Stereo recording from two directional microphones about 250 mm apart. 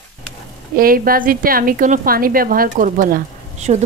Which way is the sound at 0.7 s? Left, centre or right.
Right.